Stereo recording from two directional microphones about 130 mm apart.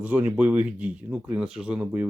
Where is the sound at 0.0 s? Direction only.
10° right (ahead or behind).